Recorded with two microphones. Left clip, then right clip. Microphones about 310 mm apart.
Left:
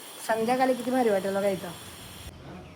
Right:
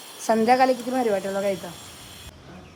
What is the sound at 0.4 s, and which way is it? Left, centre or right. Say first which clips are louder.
Speech: right 8 dB; right.